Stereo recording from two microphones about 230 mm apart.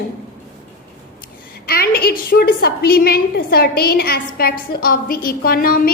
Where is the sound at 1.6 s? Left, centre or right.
Left.